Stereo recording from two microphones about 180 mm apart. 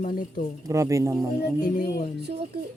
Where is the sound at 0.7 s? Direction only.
15° right (ahead or behind).